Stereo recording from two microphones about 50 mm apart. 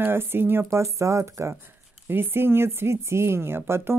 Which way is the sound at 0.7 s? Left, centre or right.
Right.